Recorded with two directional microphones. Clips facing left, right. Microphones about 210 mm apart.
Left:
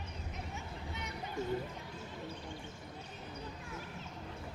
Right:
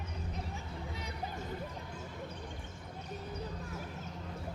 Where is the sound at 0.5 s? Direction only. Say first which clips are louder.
Right 2 dB; 35° right (ahead or behind).